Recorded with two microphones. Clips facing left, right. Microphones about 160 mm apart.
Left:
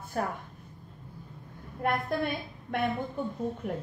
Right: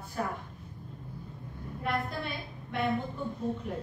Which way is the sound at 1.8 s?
55° left (ahead or behind).